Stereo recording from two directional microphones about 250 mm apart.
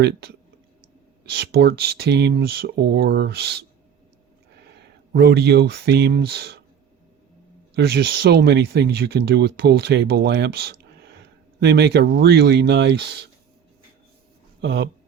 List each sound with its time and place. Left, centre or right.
0.0 s speech: right
4.6 s speech: right
7.8 s speech: right
14.6 s speech: right